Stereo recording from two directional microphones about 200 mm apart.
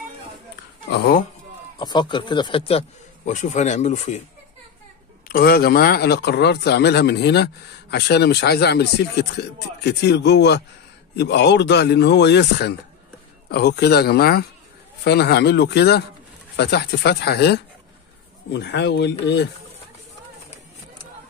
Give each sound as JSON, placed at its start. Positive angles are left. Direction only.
{"t": 0.9, "sound": "speech", "side_deg": 50}
{"t": 1.8, "sound": "speech", "side_deg": 20}
{"t": 3.3, "sound": "speech", "side_deg": 35}
{"t": 5.3, "sound": "speech", "side_deg": 50}